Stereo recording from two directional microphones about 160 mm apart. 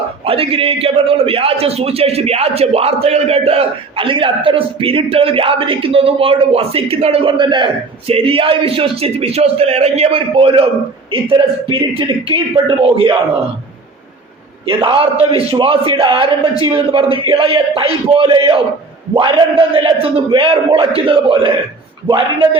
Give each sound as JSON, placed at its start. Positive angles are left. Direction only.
{"t": 0.3, "sound": "a man's voice", "side_deg": -35}
{"t": 14.7, "sound": "a man's voice", "side_deg": -35}